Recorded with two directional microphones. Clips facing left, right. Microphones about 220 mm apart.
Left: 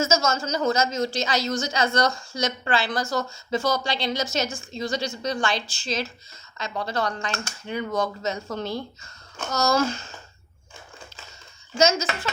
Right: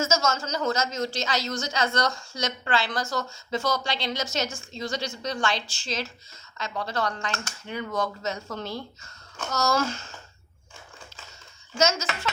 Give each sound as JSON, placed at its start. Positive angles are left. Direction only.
{"t": 0.0, "sound": "speech", "side_deg": 10}
{"t": 11.8, "sound": "speech", "side_deg": 10}